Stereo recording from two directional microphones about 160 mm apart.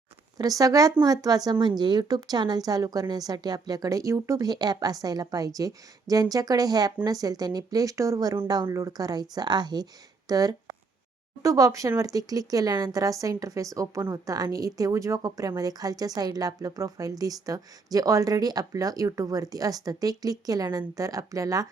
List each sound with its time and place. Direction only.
0.3 s speech: 20° right (ahead or behind)